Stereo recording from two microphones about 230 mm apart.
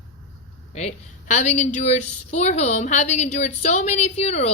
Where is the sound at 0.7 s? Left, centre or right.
Left.